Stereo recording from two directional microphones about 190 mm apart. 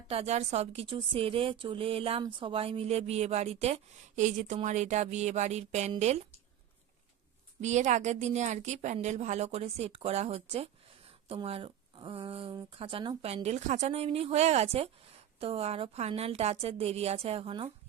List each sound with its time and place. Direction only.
0.1 s speech: 35° right (ahead or behind)
7.6 s speech: 40° right (ahead or behind)